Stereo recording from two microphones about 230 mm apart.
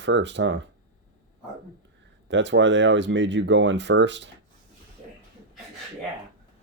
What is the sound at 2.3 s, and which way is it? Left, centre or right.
Speech, right.